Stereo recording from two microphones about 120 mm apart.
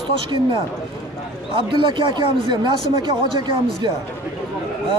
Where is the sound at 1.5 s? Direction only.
45° right (ahead or behind).